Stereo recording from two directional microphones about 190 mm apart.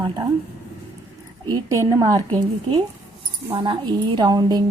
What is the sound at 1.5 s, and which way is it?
A woman's voice, 15° right (ahead or behind).